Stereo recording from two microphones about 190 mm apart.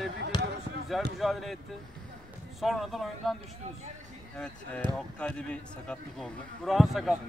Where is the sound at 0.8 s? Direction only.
Centre (ahead or behind).